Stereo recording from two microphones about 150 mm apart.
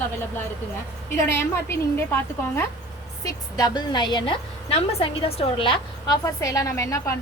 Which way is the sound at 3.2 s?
25° left (ahead or behind).